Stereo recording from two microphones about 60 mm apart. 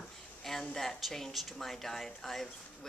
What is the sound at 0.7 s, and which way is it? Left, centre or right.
Speech, centre.